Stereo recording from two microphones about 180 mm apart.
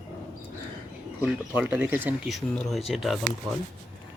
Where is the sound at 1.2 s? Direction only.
10° right (ahead or behind).